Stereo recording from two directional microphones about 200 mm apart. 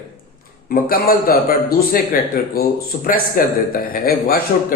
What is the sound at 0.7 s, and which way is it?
Speech, 45° left (ahead or behind).